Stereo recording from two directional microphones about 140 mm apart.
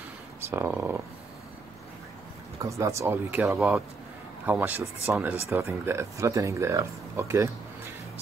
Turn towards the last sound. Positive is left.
turn(degrees=-20)  # may be behind; listen again after turning